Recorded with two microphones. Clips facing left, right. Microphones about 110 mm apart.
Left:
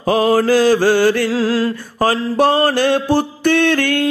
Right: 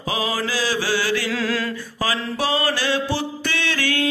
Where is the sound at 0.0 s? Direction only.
50° left (ahead or behind).